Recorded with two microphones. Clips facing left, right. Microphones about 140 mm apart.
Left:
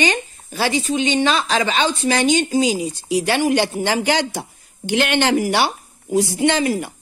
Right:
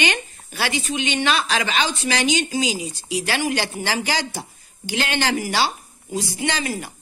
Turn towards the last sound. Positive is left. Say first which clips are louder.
# left 8 dB
turn(degrees=60)  # may be behind; listen again after turning